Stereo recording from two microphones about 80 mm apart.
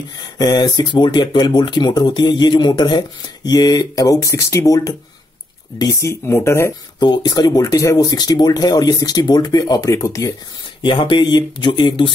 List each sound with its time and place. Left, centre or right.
0.4 s speech: left
5.9 s speech: left
7.0 s speech: left
8.1 s speech: left
10.8 s speech: left